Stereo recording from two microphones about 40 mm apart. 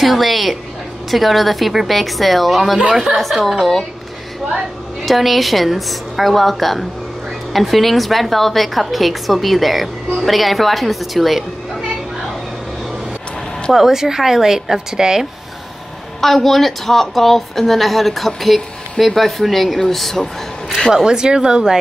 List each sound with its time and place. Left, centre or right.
0.0 s a woman's voice: centre
2.9 s speech: centre
3.4 s a woman's voice: centre
5.0 s a woman's voice: centre
13.7 s speech: centre
16.2 s a woman's voice: centre
20.9 s speech: centre